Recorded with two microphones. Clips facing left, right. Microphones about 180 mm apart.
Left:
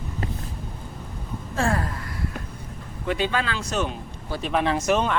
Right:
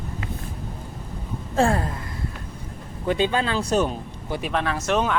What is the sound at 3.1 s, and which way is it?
Speech, 30° right (ahead or behind).